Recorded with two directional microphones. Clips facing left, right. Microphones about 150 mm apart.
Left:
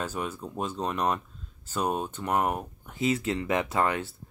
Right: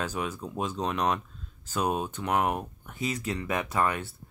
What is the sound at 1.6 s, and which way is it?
Speech, 10° right (ahead or behind).